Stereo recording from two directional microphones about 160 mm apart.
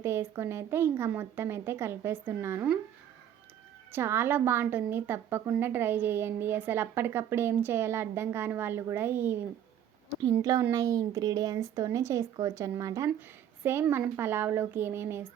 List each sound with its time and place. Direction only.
0.0 s a woman's voice: 15° right (ahead or behind)
3.9 s a woman's voice: 15° right (ahead or behind)